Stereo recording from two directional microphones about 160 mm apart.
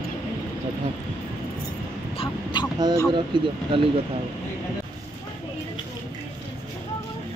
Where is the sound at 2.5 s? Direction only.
30° left (ahead or behind).